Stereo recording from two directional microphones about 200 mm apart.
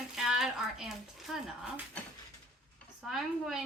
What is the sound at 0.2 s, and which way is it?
A woman's voice, centre (ahead or behind).